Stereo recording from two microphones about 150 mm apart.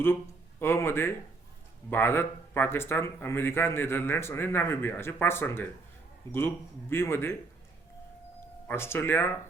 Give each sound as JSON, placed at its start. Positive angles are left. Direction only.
{"t": 0.6, "sound": "speech", "side_deg": 15}
{"t": 8.6, "sound": "speech", "side_deg": 15}